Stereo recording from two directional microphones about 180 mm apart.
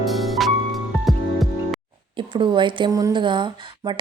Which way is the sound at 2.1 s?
25° right (ahead or behind).